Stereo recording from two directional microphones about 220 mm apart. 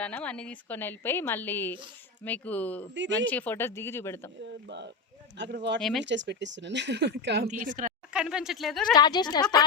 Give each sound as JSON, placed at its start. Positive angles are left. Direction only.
{"t": 0.0, "sound": "a woman's voice", "side_deg": 5}
{"t": 4.4, "sound": "speech", "side_deg": -50}
{"t": 5.8, "sound": "speech", "side_deg": 0}
{"t": 6.1, "sound": "speech", "side_deg": -55}
{"t": 7.4, "sound": "a woman's voice", "side_deg": -35}
{"t": 8.1, "sound": "speech", "side_deg": -5}
{"t": 8.9, "sound": "a woman's voice", "side_deg": 20}